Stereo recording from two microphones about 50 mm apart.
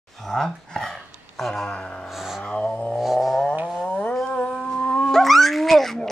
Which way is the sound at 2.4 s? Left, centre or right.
Left.